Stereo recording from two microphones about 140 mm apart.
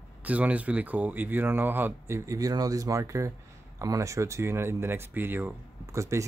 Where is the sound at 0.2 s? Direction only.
10° right (ahead or behind).